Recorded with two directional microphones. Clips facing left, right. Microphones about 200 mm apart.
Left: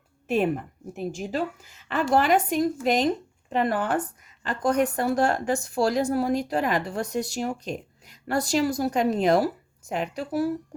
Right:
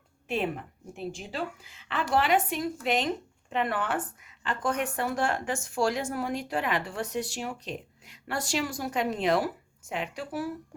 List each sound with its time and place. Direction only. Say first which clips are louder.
0.3 s a woman's voice: left 6 dB; 45° left (ahead or behind)